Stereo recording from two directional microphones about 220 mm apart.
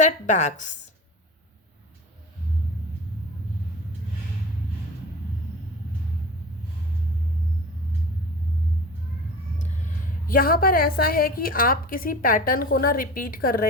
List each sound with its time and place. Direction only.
0.0 s a woman's voice: 35° left (ahead or behind)
10.2 s a woman's voice: 40° left (ahead or behind)